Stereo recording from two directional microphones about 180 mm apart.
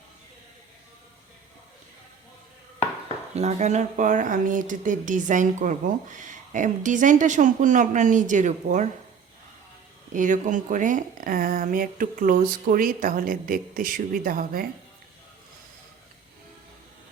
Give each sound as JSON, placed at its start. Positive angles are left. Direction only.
{"t": 3.3, "sound": "speech", "side_deg": -40}
{"t": 10.2, "sound": "speech", "side_deg": -45}